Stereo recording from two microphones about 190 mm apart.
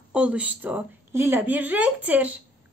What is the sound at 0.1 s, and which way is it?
A woman's voice, 5° right (ahead or behind).